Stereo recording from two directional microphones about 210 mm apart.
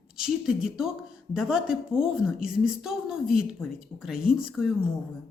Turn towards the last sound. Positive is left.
turn(degrees=-5)  # may be behind; listen again after turning